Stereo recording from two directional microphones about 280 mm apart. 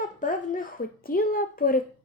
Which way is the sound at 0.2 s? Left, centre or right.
Left.